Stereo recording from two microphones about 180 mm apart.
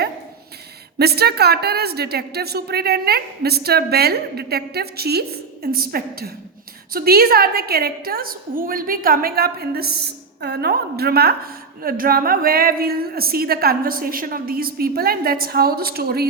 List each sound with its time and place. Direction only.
0.9 s a woman's voice: 60° right (ahead or behind)